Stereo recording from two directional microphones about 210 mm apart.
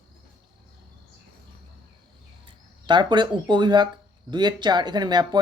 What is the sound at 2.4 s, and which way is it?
Speech, 20° right (ahead or behind).